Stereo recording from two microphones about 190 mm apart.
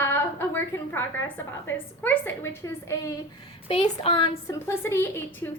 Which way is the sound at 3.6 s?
30° left (ahead or behind).